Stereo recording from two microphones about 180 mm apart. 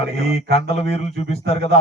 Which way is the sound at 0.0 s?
35° left (ahead or behind).